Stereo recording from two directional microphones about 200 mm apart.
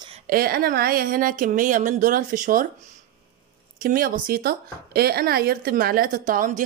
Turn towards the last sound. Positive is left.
turn(degrees=-40)  # may be behind; listen again after turning